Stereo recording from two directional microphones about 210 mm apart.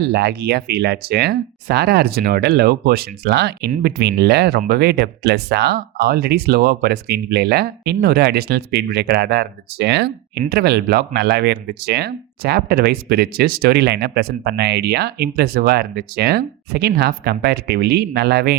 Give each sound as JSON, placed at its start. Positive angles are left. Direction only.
{"t": 0.0, "sound": "speech", "side_deg": -55}